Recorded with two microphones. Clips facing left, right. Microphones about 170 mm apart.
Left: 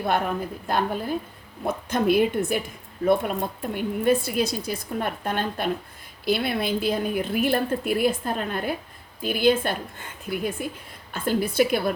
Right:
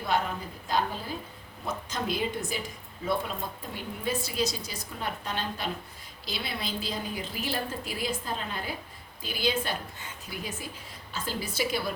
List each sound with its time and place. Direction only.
0.0 s speech: 55° left (ahead or behind)